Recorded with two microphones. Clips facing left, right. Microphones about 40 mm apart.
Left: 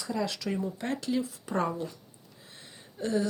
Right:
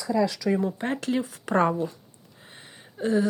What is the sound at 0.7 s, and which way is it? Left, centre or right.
Speech, right.